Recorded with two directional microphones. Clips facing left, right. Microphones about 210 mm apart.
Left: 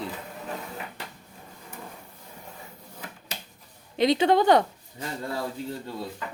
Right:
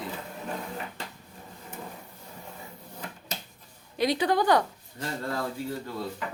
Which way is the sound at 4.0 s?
25° left (ahead or behind).